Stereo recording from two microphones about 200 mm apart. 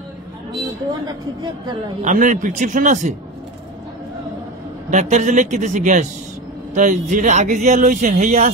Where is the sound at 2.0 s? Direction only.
40° right (ahead or behind).